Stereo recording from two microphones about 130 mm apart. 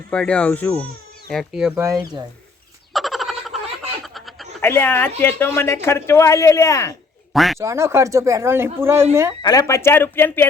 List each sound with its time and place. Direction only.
0.1 s speech: 10° left (ahead or behind)
1.3 s speech: centre (ahead or behind)
1.7 s speech: 20° right (ahead or behind)
2.9 s frog: centre (ahead or behind)
4.0 s a sound: centre (ahead or behind)
4.6 s speech: 20° left (ahead or behind)
7.3 s speech: centre (ahead or behind)
7.6 s speech: 20° right (ahead or behind)
9.4 s speech: 30° left (ahead or behind)